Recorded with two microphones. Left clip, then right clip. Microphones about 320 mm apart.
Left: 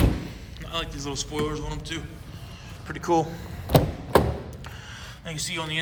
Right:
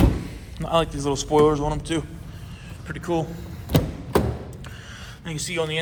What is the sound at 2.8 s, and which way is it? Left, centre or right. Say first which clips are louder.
Speech: left 3 dB; centre.